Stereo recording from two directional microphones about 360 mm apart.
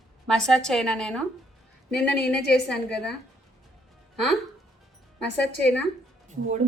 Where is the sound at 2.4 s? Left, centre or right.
Left.